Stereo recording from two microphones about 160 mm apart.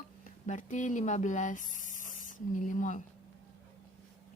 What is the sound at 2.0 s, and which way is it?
Spray, 55° left (ahead or behind).